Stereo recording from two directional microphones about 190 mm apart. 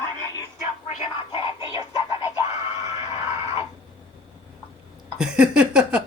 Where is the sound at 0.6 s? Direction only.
35° left (ahead or behind).